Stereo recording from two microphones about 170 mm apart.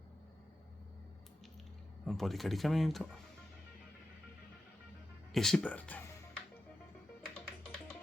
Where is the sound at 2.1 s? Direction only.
Centre (ahead or behind).